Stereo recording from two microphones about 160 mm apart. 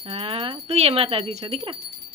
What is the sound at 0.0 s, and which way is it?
Speech, 35° right (ahead or behind).